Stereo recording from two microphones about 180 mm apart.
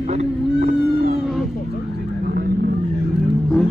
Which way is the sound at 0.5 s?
55° right (ahead or behind).